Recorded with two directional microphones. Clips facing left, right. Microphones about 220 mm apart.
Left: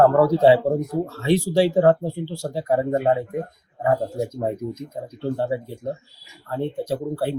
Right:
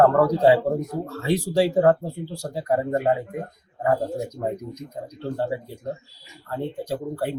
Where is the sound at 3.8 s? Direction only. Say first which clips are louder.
Left 1 dB; 25° left (ahead or behind).